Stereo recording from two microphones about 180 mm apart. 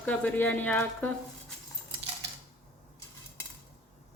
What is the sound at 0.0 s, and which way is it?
Speech, 10° left (ahead or behind).